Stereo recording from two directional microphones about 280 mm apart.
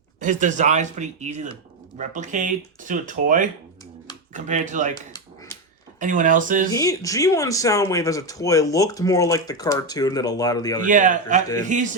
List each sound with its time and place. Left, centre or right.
0.2 s speech: right
6.0 s speech: right
6.7 s speech: centre
10.8 s speech: right